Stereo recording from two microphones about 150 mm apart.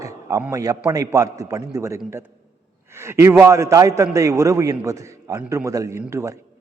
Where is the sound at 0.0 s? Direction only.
20° right (ahead or behind).